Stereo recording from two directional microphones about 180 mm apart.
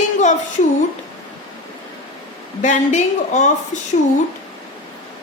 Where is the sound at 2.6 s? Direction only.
40° left (ahead or behind).